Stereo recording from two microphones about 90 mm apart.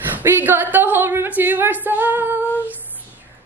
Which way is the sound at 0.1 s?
25° right (ahead or behind).